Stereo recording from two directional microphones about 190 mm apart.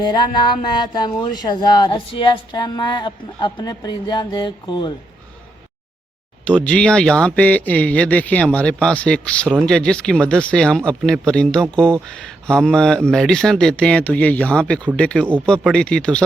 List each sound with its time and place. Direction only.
0.0 s speech: 25° left (ahead or behind)
6.4 s speech: 5° left (ahead or behind)